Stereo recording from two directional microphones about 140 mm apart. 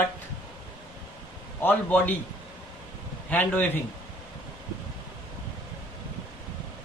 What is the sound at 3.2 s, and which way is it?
Speech, 10° left (ahead or behind).